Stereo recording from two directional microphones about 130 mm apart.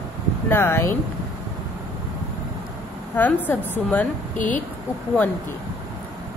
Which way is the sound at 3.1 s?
15° left (ahead or behind).